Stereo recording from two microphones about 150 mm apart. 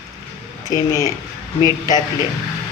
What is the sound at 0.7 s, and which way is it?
Speech, 20° left (ahead or behind).